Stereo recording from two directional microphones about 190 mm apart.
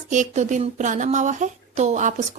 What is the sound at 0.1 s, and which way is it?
A woman's voice, 40° right (ahead or behind).